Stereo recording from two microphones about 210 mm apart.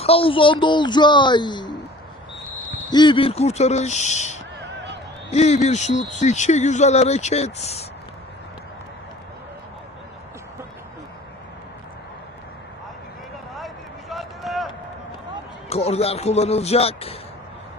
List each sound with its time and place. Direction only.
0.0 s speech: 25° left (ahead or behind)
2.9 s speech: 20° left (ahead or behind)
14.1 s run: centre (ahead or behind)
15.7 s speech: 30° left (ahead or behind)